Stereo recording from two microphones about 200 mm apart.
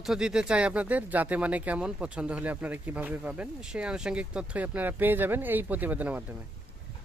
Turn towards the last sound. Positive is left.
turn(degrees=-10)  # may be behind; listen again after turning